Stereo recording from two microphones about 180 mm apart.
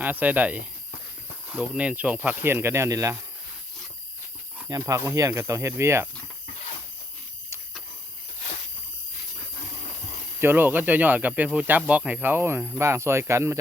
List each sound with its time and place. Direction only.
0.0 s speech: 10° right (ahead or behind)
4.7 s speech: 20° right (ahead or behind)
10.4 s speech: 10° right (ahead or behind)